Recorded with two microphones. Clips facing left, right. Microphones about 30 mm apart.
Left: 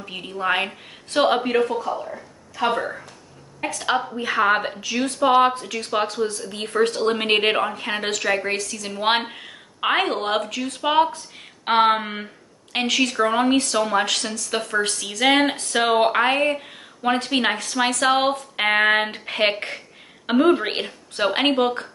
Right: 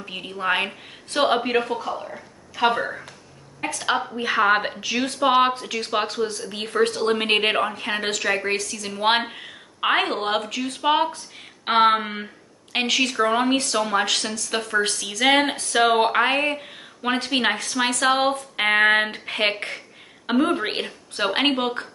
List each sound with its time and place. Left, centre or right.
0.0 s a woman's voice: centre
1.6 s speech: right
1.9 s a woman's voice: centre